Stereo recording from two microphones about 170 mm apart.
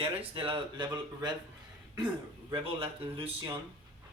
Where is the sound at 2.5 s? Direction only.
30° right (ahead or behind).